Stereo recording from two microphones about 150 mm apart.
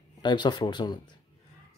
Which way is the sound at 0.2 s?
30° left (ahead or behind).